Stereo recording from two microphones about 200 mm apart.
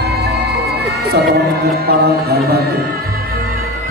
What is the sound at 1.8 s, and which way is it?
Music, 50° right (ahead or behind).